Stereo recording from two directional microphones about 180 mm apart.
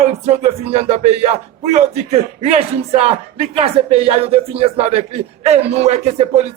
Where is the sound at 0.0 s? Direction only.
35° right (ahead or behind).